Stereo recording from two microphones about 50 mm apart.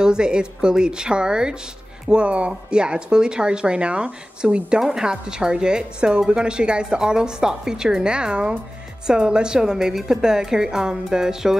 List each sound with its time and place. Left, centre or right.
0.0 s a woman's voice: centre